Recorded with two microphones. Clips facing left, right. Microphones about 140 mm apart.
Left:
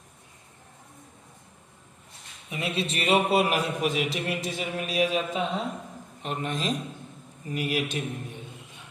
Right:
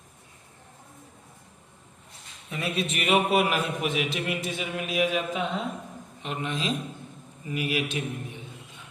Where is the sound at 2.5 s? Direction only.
25° left (ahead or behind).